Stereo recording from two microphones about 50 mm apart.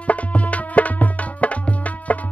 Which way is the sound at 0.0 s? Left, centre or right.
Left.